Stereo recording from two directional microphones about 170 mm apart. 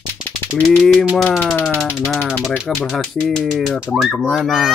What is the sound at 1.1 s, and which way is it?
Speech, 5° left (ahead or behind).